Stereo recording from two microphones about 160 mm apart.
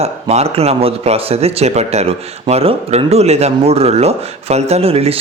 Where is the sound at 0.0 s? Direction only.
40° right (ahead or behind).